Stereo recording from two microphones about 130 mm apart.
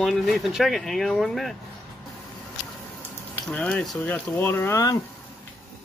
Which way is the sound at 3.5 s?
10° left (ahead or behind).